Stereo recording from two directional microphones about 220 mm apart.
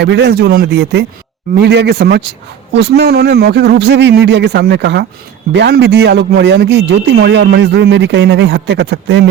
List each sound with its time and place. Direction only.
0.0 s a man's voice: 50° right (ahead or behind)